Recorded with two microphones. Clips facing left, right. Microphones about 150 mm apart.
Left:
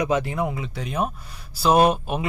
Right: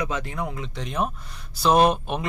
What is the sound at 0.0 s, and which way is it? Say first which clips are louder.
A man's voice: left 6 dB; 10° left (ahead or behind).